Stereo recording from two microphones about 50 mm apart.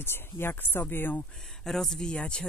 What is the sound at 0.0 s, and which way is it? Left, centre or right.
Speech, left.